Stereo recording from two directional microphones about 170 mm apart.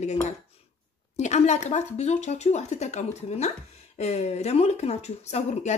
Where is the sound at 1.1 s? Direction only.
40° left (ahead or behind).